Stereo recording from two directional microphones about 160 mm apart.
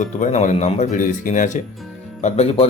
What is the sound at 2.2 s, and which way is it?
Speech, 40° left (ahead or behind).